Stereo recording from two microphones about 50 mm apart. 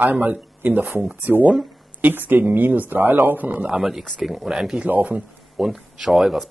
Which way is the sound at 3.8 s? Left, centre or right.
Centre.